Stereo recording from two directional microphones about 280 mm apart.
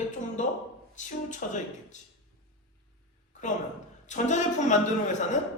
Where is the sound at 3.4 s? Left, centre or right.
Left.